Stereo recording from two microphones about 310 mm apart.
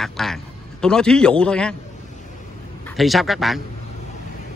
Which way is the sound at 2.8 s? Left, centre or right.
Centre.